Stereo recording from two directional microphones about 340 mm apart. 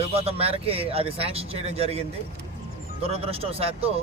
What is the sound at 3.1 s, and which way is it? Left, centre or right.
Speech, centre.